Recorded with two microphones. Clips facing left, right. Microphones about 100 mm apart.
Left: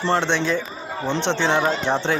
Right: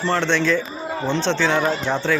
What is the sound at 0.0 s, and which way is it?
Speech, 25° left (ahead or behind).